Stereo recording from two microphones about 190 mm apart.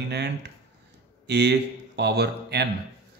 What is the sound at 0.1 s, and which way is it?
A man's voice, 60° right (ahead or behind).